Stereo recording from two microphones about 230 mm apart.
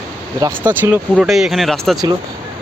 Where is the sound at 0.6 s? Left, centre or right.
Centre.